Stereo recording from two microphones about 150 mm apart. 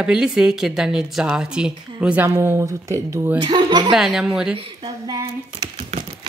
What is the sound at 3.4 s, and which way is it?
Speech, 30° right (ahead or behind).